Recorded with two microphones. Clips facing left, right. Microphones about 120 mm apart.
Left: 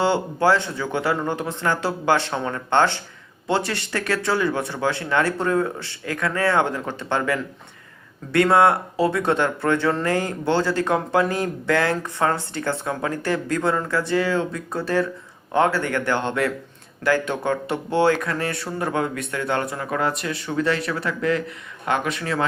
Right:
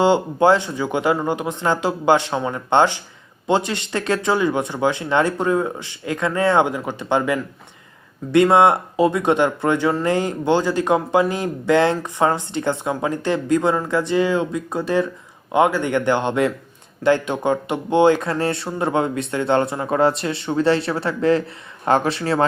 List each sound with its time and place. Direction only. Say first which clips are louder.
0.0 s speech: right 4 dB; 15° right (ahead or behind)